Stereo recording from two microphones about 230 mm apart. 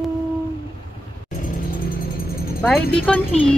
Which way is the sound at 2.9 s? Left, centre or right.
Centre.